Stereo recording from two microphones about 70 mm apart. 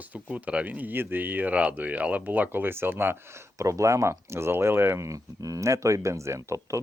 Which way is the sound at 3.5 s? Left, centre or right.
Right.